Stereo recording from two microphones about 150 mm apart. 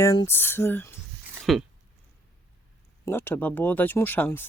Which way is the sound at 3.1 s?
15° left (ahead or behind).